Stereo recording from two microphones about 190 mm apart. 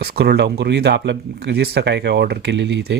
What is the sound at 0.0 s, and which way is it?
Speech, 60° right (ahead or behind).